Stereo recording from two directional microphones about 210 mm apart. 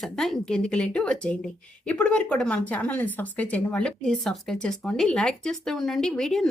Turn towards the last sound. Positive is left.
turn(degrees=0)  # may be behind; listen again after turning